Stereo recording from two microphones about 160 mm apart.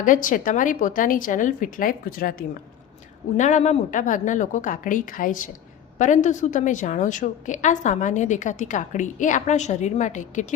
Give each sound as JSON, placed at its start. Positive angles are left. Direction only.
{"t": 0.0, "sound": "a woman's voice", "side_deg": 55}
{"t": 3.3, "sound": "a woman's voice", "side_deg": 50}